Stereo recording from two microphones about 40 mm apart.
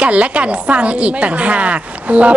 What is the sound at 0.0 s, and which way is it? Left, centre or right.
Speech, right.